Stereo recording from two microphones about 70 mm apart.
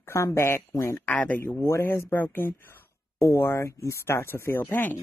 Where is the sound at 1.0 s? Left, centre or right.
Left.